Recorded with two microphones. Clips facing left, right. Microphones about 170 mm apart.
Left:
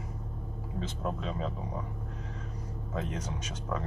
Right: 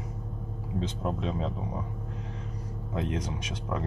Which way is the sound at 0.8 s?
20° right (ahead or behind).